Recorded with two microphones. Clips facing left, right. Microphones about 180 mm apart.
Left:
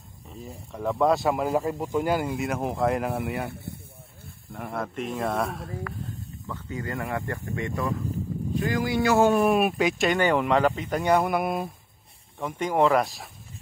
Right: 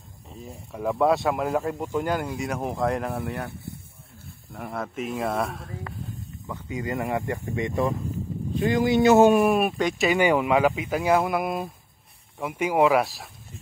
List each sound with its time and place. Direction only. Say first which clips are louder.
0.3 s speech: even; centre (ahead or behind)
4.5 s speech: even; centre (ahead or behind)
6.4 s speech: right 2 dB; 15° right (ahead or behind)
9.3 s speech: right 1 dB; 5° right (ahead or behind)